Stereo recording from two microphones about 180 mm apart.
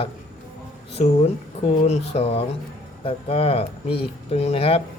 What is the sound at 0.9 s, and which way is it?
Speech, 35° left (ahead or behind).